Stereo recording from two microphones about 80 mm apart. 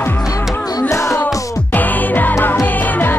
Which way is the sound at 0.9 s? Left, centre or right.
Left.